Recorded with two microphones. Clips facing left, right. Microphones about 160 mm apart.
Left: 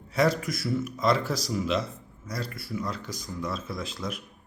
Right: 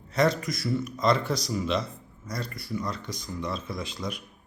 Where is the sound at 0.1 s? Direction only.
5° left (ahead or behind).